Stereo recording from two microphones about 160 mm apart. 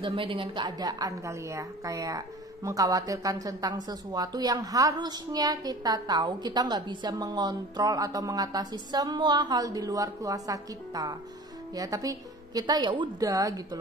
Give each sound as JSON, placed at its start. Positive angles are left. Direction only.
{"t": 0.0, "sound": "a woman's voice", "side_deg": -35}